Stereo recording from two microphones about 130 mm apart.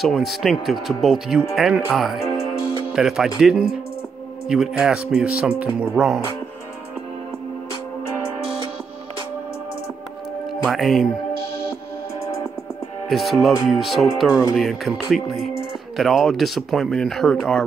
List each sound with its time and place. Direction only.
0.0 s speech: centre (ahead or behind)
10.7 s speech: centre (ahead or behind)
13.1 s speech: centre (ahead or behind)